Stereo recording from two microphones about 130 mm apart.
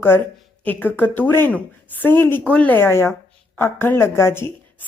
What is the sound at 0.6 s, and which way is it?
A woman's voice, 15° left (ahead or behind).